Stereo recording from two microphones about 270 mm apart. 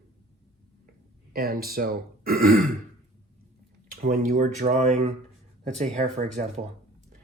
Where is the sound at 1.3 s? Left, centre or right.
Right.